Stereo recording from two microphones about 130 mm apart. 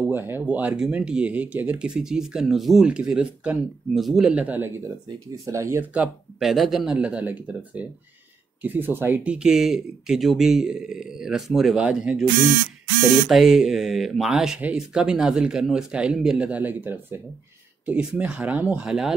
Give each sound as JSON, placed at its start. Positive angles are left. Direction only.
{"t": 0.1, "sound": "speech", "side_deg": -15}
{"t": 5.9, "sound": "speech", "side_deg": 0}
{"t": 13.3, "sound": "speech", "side_deg": 0}